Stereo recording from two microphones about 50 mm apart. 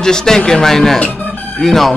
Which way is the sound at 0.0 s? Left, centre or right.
Centre.